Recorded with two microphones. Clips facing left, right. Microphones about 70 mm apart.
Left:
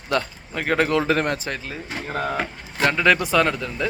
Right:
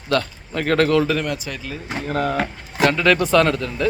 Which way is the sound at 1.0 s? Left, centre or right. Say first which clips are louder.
Left 1 dB; left.